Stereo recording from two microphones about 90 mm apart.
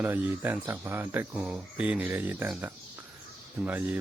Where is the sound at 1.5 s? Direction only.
10° right (ahead or behind).